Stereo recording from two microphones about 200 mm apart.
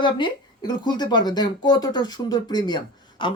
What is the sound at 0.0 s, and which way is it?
Speech, 25° left (ahead or behind).